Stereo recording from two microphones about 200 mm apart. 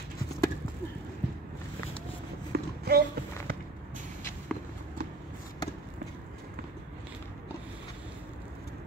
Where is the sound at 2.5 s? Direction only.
50° right (ahead or behind).